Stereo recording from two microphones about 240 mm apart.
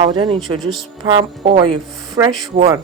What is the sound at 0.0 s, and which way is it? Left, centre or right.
Speech, right.